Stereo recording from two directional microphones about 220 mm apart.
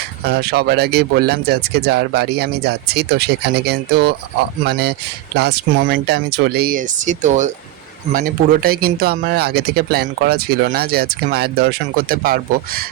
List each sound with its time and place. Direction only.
0.3 s speech: 45° right (ahead or behind)